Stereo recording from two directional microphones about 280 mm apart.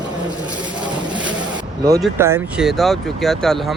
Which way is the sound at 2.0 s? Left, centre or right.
Centre.